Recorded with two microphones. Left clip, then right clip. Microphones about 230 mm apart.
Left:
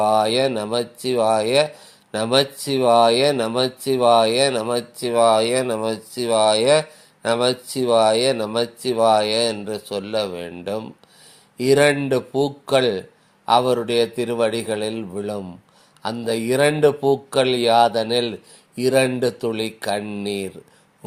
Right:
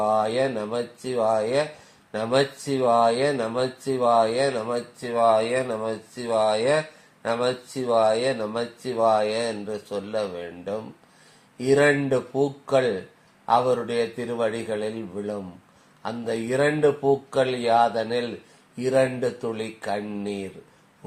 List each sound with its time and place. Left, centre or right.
0.0 s speech: left